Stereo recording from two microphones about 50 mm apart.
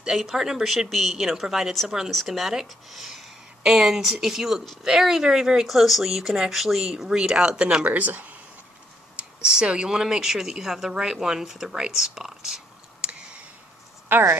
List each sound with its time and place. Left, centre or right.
0.0 s speech: centre
7.8 s speech: right
9.1 s speech: centre
13.0 s clicking: right